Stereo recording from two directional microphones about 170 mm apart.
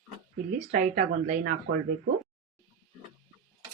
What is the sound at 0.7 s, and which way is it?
Speech, 50° right (ahead or behind).